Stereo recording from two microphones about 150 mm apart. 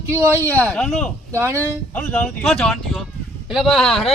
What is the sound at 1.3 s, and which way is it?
Speech, 15° right (ahead or behind).